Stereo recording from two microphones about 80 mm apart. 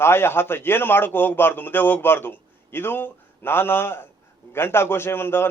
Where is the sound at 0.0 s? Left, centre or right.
Left.